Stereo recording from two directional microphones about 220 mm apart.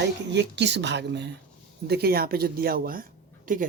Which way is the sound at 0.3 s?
50° right (ahead or behind).